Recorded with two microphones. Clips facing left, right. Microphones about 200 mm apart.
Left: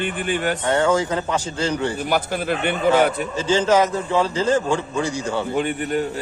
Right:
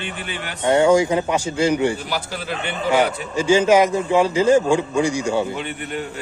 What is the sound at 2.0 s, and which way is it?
Speech, 55° left (ahead or behind).